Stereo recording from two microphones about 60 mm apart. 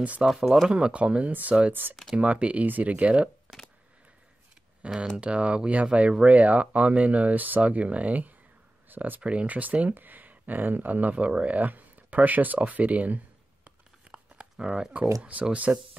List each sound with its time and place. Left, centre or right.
0.0 s speech: right
5.1 s speech: centre
9.2 s speech: centre
14.1 s a sound: centre
15.5 s speech: right